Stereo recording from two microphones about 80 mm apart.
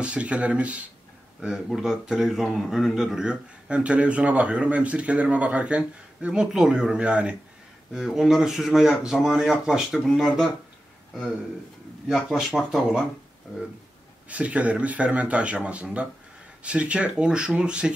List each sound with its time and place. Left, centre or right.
0.0 s speech: centre
1.7 s speech: centre
9.9 s speech: centre
12.1 s speech: centre
14.3 s speech: centre